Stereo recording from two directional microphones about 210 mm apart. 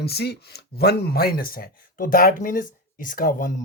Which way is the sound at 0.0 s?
50° left (ahead or behind).